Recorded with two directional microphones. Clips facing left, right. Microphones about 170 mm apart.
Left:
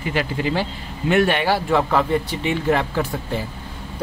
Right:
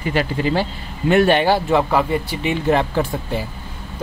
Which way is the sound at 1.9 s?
10° right (ahead or behind).